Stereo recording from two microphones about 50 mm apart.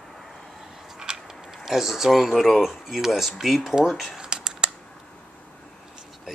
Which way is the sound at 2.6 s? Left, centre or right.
Centre.